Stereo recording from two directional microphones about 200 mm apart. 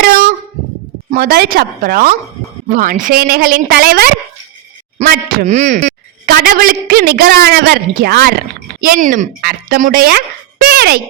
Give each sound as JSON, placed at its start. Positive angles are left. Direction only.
{"t": 1.1, "sound": "a woman's voice", "side_deg": -45}